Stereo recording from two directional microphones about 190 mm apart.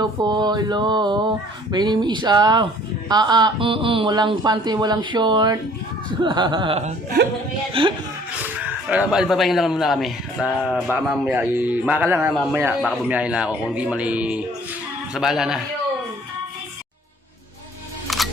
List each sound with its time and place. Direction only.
0.0 s speech: 20° right (ahead or behind)
8.4 s speech: 10° right (ahead or behind)
18.1 s music: centre (ahead or behind)